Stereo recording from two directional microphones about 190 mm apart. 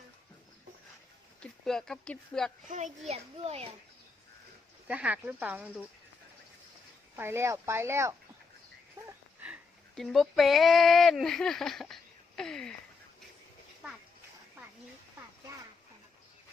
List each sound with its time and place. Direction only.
1.4 s speech: 5° left (ahead or behind)
2.6 s a child's voice: 40° right (ahead or behind)
4.9 s speech: 5° right (ahead or behind)
7.2 s speech: 15° right (ahead or behind); by 12.7 s 5° left (ahead or behind)